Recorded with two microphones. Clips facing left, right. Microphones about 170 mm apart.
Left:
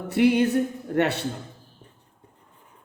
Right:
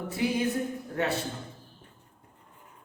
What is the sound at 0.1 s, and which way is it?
A woman's voice, 70° left (ahead or behind).